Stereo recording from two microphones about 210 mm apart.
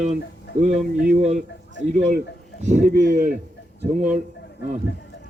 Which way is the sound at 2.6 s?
35° right (ahead or behind).